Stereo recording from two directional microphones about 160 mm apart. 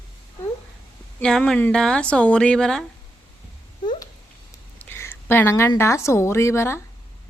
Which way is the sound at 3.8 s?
30° left (ahead or behind).